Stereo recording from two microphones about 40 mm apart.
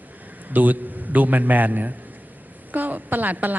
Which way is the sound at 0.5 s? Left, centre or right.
Right.